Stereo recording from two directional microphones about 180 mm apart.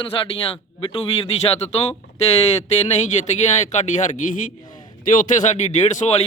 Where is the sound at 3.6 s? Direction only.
40° left (ahead or behind).